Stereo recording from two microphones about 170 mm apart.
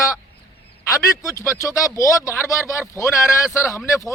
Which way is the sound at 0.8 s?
15° left (ahead or behind).